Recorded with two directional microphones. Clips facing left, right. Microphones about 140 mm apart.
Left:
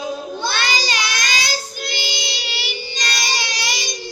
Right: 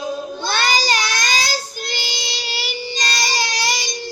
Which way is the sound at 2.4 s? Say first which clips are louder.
Right 2 dB; 40° right (ahead or behind).